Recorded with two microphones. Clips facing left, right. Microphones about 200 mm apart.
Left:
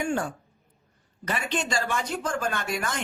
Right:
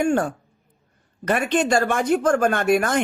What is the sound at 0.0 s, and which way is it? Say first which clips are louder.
A woman's voice: right 7 dB; 50° right (ahead or behind).